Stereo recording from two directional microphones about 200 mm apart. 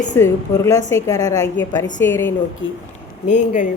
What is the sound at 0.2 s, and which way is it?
A woman's voice, 15° left (ahead or behind).